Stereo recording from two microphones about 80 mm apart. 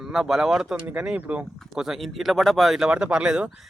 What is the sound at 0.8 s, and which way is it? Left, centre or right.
Speech, centre.